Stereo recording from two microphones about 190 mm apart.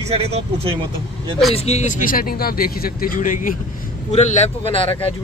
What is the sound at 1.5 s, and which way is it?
Speech, 35° left (ahead or behind).